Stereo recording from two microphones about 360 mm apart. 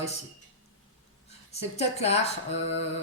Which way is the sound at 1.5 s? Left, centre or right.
Centre.